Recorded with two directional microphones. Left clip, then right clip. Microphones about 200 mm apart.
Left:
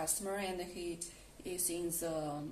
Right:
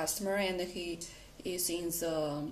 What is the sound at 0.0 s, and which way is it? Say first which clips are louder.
Speech: right 6 dB; 30° right (ahead or behind).